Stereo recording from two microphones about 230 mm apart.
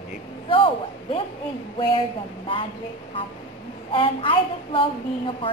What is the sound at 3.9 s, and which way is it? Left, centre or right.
Speech, left.